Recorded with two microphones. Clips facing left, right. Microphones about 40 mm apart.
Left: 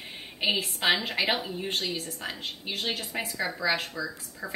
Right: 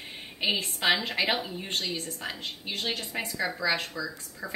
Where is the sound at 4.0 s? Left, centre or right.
Left.